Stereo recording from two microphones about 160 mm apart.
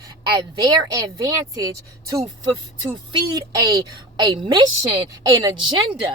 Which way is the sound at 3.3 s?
25° right (ahead or behind).